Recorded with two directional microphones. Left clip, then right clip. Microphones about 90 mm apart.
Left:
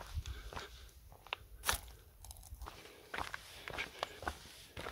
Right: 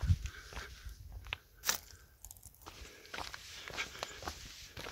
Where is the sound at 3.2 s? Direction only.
Centre (ahead or behind).